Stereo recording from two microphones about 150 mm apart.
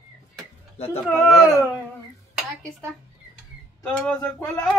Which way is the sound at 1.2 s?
20° left (ahead or behind).